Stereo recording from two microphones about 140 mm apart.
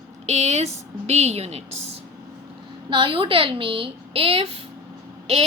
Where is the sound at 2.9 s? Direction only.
35° right (ahead or behind).